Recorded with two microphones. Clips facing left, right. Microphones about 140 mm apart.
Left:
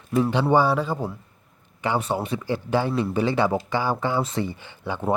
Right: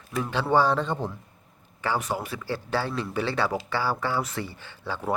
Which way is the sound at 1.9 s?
25° left (ahead or behind).